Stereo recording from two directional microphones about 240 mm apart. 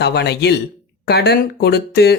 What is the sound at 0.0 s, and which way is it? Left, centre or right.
Speech, left.